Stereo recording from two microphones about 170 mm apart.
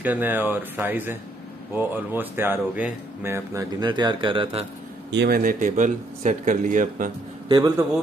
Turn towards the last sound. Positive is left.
turn(degrees=-20)  # may be behind; listen again after turning